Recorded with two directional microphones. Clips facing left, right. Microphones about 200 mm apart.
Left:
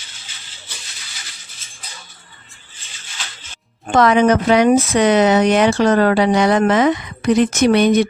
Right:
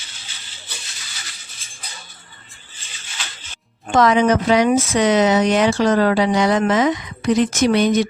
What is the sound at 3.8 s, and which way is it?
A woman's voice, 60° left (ahead or behind).